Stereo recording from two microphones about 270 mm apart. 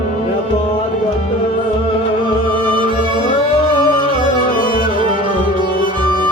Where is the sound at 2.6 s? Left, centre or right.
Centre.